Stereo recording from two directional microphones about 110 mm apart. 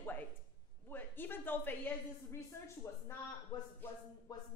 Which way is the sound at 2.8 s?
25° left (ahead or behind).